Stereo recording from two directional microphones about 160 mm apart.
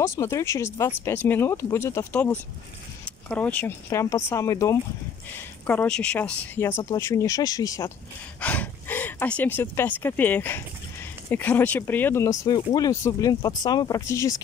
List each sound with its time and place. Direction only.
0.0 s speech: 20° left (ahead or behind)
5.7 s speech: 5° left (ahead or behind)
8.4 s speech: 10° left (ahead or behind)